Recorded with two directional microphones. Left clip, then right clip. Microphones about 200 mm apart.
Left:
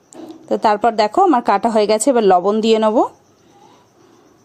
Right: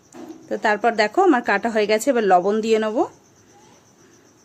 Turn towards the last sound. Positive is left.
turn(degrees=25)  # may be behind; listen again after turning